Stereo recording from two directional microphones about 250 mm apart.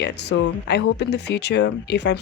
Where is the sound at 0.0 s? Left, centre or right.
Left.